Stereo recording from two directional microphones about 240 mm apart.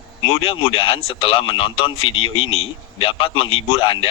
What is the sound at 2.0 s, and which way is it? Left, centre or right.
Speech, left.